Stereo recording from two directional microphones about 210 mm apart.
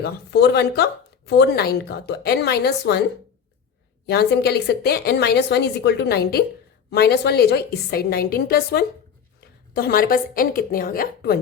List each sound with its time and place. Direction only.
0.0 s speech: 55° left (ahead or behind)
4.0 s speech: 50° left (ahead or behind)